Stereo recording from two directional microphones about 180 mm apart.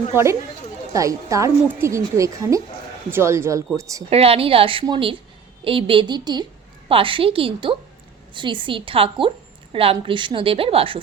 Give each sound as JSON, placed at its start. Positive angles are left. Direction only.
{"t": 0.9, "sound": "a woman's voice", "side_deg": -20}
{"t": 4.1, "sound": "a woman's voice", "side_deg": -35}